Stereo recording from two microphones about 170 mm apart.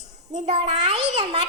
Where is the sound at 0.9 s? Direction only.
40° right (ahead or behind).